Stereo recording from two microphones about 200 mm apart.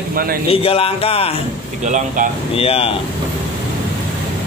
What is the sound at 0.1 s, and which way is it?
Speech, 45° right (ahead or behind).